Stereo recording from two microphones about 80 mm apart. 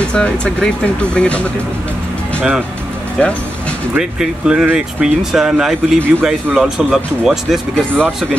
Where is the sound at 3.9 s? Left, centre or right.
Centre.